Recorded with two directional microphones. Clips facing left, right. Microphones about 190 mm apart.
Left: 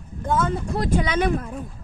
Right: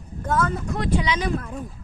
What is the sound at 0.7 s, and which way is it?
Speech, 50° left (ahead or behind).